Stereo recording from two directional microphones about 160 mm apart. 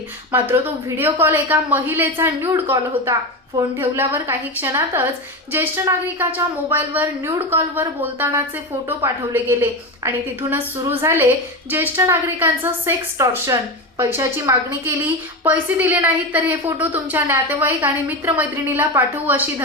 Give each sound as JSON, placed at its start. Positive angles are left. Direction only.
{"t": 0.3, "sound": "a woman's voice", "side_deg": -15}